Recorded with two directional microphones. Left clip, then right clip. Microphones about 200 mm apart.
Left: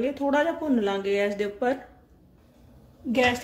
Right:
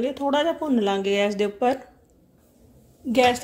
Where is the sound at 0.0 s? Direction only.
25° right (ahead or behind).